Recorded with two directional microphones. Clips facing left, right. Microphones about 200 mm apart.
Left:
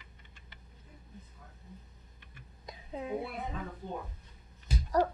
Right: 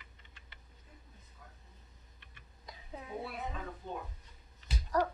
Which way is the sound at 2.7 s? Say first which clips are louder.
Left 8 dB; 20° left (ahead or behind).